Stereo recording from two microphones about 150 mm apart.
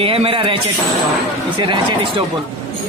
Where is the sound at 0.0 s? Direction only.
40° right (ahead or behind).